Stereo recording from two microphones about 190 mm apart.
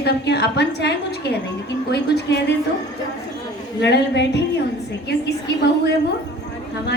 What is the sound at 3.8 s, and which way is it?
A woman's voice, 65° left (ahead or behind).